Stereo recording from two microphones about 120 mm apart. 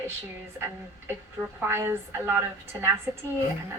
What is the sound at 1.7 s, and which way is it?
A woman's voice, 20° right (ahead or behind).